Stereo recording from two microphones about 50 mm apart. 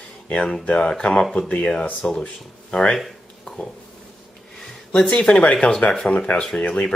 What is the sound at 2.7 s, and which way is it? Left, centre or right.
Speech, centre.